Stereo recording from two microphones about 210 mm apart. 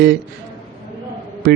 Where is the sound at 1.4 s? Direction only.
50° right (ahead or behind).